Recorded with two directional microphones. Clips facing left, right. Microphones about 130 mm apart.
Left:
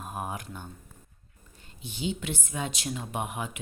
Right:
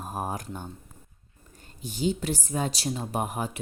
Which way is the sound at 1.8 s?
40° right (ahead or behind).